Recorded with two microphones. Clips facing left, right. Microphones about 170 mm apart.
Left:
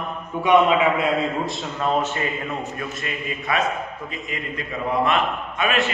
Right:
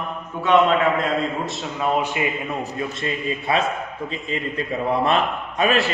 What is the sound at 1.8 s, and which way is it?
Speech, 10° right (ahead or behind).